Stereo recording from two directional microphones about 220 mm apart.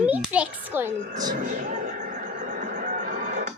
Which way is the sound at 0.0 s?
5° right (ahead or behind).